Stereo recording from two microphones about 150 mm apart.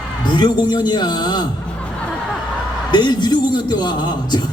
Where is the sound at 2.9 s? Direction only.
30° left (ahead or behind).